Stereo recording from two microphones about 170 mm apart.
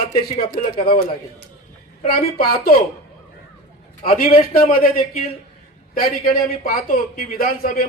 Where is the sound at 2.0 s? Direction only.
55° left (ahead or behind).